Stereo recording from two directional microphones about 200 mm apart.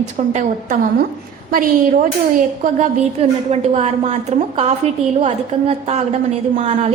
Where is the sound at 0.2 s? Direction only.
35° right (ahead or behind).